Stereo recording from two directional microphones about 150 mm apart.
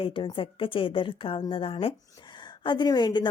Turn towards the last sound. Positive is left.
turn(degrees=30)  # may be behind; listen again after turning